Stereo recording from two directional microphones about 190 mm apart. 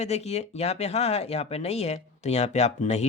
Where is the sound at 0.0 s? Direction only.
35° left (ahead or behind).